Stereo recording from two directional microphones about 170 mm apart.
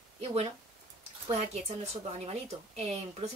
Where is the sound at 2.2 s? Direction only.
35° right (ahead or behind).